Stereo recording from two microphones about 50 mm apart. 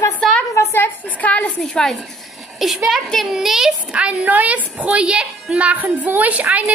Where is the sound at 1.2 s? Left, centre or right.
Left.